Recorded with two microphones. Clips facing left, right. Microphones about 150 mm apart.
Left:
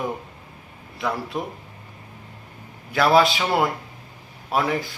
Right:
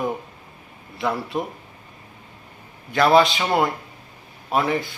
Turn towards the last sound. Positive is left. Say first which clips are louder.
# right 1 dB
turn(degrees=0)  # may be behind; listen again after turning